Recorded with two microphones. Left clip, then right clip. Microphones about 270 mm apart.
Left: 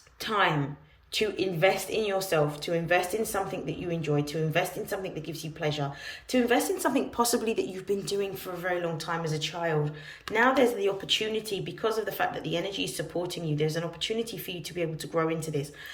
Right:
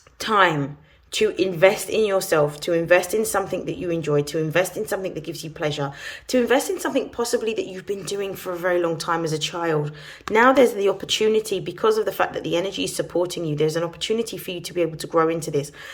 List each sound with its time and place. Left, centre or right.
0.2 s a woman's voice: centre